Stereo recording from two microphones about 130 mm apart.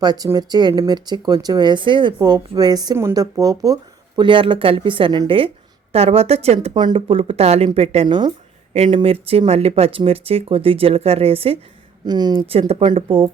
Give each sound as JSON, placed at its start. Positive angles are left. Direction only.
{"t": 0.0, "sound": "speech", "side_deg": -30}
{"t": 5.9, "sound": "speech", "side_deg": -50}
{"t": 6.7, "sound": "speech", "side_deg": -40}
{"t": 8.0, "sound": "speech", "side_deg": -35}
{"t": 12.0, "sound": "speech", "side_deg": -35}
{"t": 12.5, "sound": "speech", "side_deg": -50}